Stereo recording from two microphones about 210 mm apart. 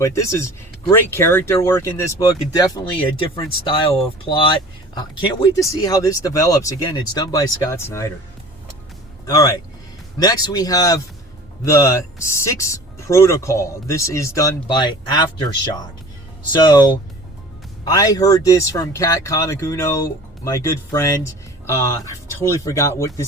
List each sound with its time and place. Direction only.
0.0 s speech: 15° left (ahead or behind)
9.2 s speech: 15° left (ahead or behind)
17.8 s speech: 15° left (ahead or behind)